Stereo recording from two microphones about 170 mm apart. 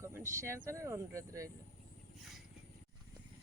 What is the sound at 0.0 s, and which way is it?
Speech, 15° right (ahead or behind).